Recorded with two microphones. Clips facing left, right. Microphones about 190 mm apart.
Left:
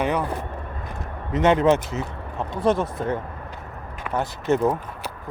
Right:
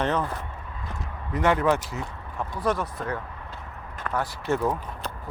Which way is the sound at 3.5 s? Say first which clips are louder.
Left 3 dB; 10° left (ahead or behind).